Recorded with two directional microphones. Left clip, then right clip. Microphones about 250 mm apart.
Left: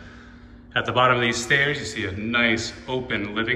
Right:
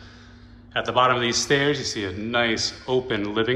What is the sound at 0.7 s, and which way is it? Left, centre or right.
A man's voice, centre.